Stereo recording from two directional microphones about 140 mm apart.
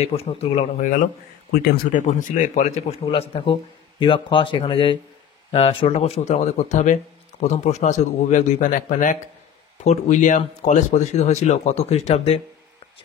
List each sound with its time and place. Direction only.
0.0 s speech: 45° left (ahead or behind)
0.7 s speech: 65° left (ahead or behind)
3.1 s speech: 40° left (ahead or behind)